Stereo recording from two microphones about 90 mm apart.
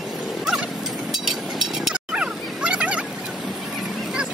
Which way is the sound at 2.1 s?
10° right (ahead or behind).